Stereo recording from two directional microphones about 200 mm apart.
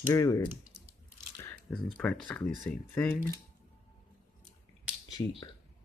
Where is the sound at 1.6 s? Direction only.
5° left (ahead or behind).